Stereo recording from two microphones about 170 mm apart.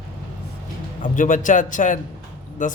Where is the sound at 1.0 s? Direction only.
50° left (ahead or behind).